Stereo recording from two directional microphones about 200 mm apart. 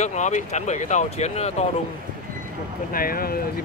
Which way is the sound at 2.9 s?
45° left (ahead or behind).